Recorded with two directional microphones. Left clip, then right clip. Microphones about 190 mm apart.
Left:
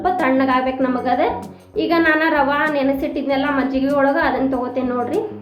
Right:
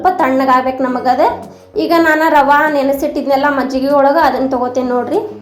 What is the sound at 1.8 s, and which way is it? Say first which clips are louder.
A woman's voice: right 5 dB; 20° right (ahead or behind).